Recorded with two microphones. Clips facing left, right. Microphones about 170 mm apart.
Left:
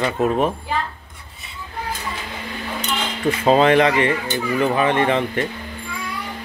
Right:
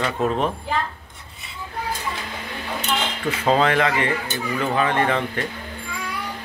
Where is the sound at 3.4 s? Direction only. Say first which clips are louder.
Left 4 dB; 25° left (ahead or behind).